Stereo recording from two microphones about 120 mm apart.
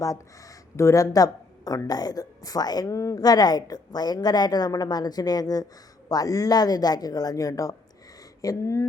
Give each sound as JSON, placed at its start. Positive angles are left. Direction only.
{"t": 0.0, "sound": "speech", "side_deg": 30}